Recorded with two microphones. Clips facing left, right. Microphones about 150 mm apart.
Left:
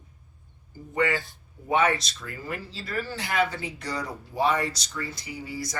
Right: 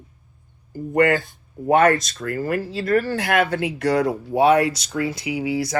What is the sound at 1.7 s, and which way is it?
Speech, 50° right (ahead or behind).